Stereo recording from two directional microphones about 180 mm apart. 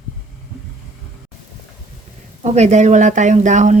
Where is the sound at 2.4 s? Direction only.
40° right (ahead or behind).